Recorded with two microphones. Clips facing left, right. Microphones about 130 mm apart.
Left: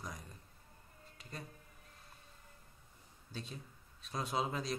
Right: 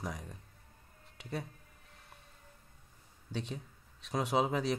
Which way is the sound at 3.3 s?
70° right (ahead or behind).